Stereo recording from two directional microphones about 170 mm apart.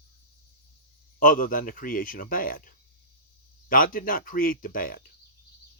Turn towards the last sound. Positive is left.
turn(degrees=55)  # may be behind; listen again after turning